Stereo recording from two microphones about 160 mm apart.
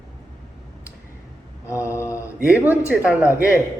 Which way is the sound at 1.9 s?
20° left (ahead or behind).